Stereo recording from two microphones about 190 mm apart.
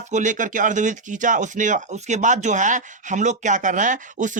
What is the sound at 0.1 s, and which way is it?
Speech, 40° right (ahead or behind).